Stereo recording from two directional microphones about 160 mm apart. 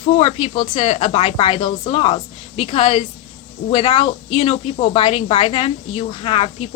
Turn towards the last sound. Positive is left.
turn(degrees=35)  # may be behind; listen again after turning